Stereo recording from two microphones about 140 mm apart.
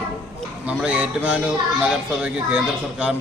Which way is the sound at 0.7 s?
10° right (ahead or behind).